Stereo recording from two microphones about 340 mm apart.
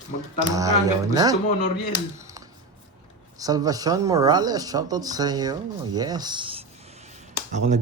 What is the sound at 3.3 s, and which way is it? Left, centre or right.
A man's voice, centre.